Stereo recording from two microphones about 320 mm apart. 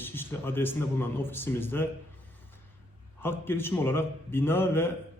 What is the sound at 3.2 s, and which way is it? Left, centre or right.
A man's voice, centre.